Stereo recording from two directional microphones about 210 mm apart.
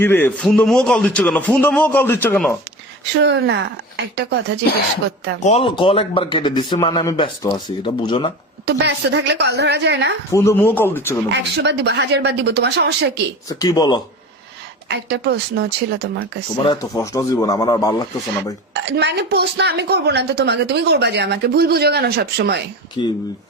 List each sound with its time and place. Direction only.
0.0 s a man's voice: 10° left (ahead or behind)
3.2 s speech: 55° right (ahead or behind)
5.4 s a man's voice: 30° left (ahead or behind)
8.6 s speech: 55° right (ahead or behind)
10.3 s speech: 10° left (ahead or behind)
11.3 s speech: 55° right (ahead or behind)
13.5 s speech: 15° left (ahead or behind)
14.8 s a woman's voice: 55° right (ahead or behind)
16.6 s speech: 15° left (ahead or behind)
18.7 s a woman's voice: 55° right (ahead or behind)
23.0 s a man's voice: 25° left (ahead or behind)